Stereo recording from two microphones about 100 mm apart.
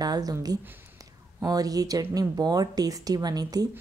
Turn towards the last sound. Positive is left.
turn(degrees=-40)  # may be behind; listen again after turning